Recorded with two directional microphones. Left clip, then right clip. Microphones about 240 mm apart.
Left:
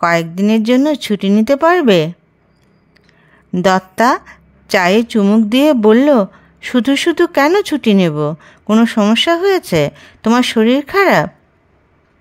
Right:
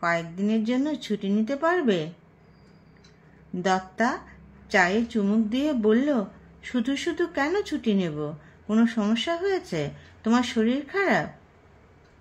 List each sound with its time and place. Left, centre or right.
0.0 s a woman's voice: left
3.5 s a woman's voice: left